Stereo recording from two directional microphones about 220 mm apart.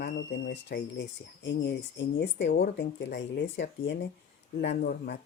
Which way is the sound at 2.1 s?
50° left (ahead or behind).